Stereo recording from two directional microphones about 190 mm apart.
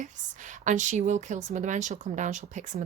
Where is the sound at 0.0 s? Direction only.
40° right (ahead or behind).